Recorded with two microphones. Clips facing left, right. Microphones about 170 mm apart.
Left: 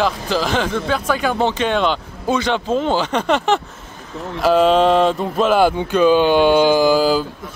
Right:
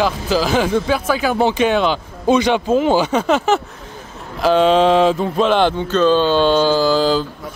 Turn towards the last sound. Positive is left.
turn(degrees=10)  # may be behind; listen again after turning